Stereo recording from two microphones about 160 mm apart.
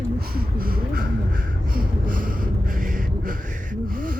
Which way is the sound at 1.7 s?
60° right (ahead or behind).